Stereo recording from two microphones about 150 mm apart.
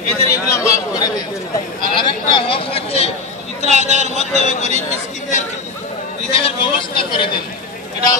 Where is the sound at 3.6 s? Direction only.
50° right (ahead or behind).